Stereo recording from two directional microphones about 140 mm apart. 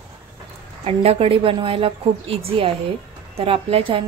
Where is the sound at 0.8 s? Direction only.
45° right (ahead or behind).